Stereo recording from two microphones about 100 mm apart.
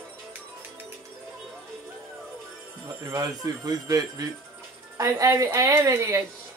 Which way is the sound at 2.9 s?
35° right (ahead or behind).